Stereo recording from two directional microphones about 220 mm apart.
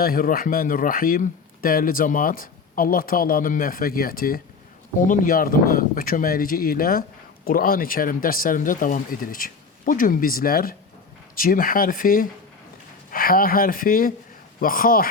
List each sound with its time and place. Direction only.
0.0 s speech: 40° left (ahead or behind)